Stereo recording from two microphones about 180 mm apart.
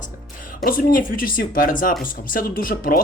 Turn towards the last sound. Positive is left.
turn(degrees=50)  # may be behind; listen again after turning